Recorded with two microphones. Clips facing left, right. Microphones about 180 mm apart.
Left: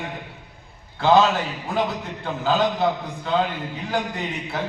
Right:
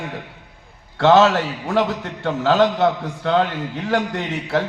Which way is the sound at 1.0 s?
80° right.